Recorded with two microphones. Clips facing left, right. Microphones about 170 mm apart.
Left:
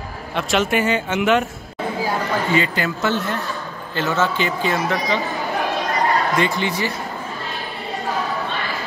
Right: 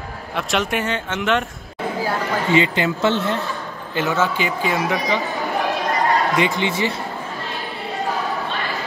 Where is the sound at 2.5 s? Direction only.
20° right (ahead or behind).